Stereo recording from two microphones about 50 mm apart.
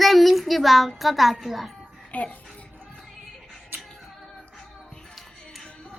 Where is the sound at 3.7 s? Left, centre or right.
Right.